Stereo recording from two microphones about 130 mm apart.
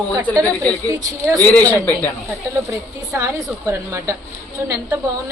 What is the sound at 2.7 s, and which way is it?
A woman's voice, 20° right (ahead or behind).